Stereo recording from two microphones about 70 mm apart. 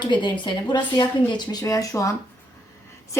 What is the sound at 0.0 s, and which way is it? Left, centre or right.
Speech, left.